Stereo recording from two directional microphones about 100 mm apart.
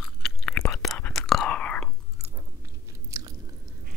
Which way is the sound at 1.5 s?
10° left (ahead or behind).